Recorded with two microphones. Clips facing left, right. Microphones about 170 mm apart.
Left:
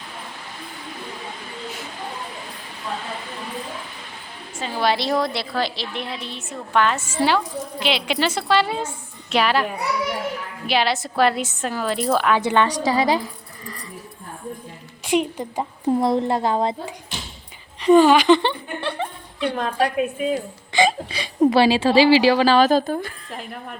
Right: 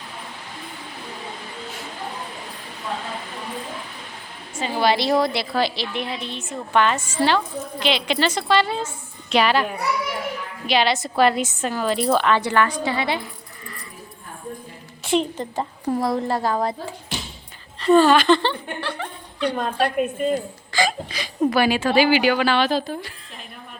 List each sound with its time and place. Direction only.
4.6 s a woman's voice: centre (ahead or behind)
12.4 s a woman's voice: 20° left (ahead or behind)
12.8 s a woman's voice: 40° left (ahead or behind)
15.0 s a woman's voice: 10° left (ahead or behind)
16.0 s a woman's voice: 20° left (ahead or behind)
19.4 s a woman's voice: centre (ahead or behind)
20.7 s a woman's voice: 25° left (ahead or behind); by 23.7 s 55° left (ahead or behind)